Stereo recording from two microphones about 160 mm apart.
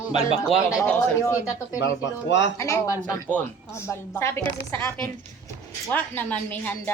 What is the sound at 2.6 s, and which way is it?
A woman's voice, 20° left (ahead or behind).